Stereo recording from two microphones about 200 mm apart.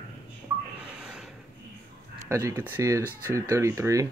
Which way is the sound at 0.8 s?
5° right (ahead or behind).